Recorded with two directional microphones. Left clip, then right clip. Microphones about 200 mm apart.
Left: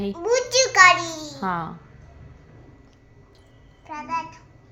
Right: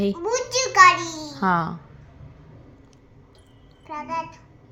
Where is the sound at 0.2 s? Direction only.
25° left (ahead or behind).